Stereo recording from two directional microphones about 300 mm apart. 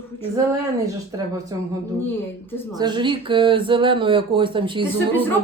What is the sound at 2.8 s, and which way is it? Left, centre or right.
Speech, centre.